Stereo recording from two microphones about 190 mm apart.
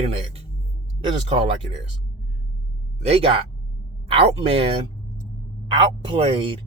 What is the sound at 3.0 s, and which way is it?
Speech, 30° right (ahead or behind).